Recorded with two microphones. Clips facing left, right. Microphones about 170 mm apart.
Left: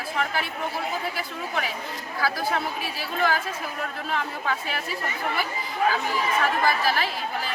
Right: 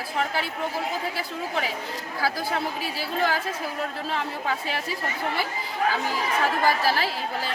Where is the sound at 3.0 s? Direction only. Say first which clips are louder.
Left 1 dB; 30° right (ahead or behind).